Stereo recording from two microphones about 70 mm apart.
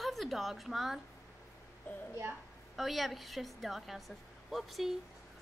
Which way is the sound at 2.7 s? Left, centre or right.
Centre.